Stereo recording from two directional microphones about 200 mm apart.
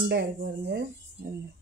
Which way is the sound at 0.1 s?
55° right (ahead or behind).